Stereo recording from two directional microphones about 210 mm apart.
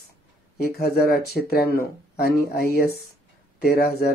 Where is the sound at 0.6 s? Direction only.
45° left (ahead or behind).